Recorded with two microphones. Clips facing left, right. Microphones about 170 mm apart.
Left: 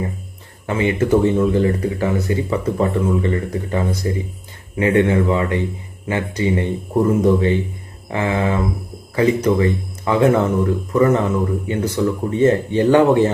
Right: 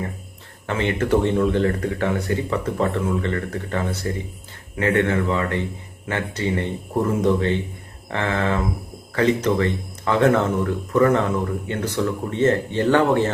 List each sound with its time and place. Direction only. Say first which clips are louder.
0.7 s speech: left 4 dB; 10° left (ahead or behind)